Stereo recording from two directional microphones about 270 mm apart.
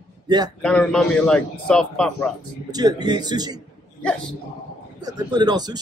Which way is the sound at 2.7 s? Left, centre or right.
Centre.